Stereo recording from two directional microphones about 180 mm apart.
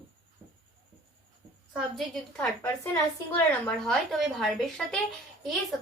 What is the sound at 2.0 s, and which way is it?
A woman's voice, 10° left (ahead or behind).